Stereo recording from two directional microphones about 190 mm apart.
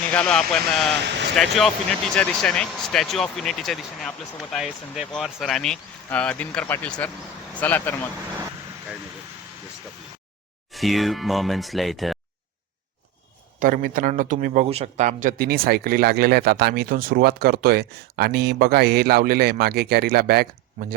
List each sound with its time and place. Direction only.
0.1 s speech: 5° left (ahead or behind)
0.9 s speech: 65° right (ahead or behind)
1.4 s speech: centre (ahead or behind)
10.7 s speech: centre (ahead or behind)
13.6 s a man's voice: 45° right (ahead or behind)